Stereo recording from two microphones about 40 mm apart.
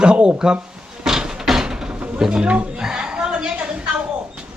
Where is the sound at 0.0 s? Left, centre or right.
Right.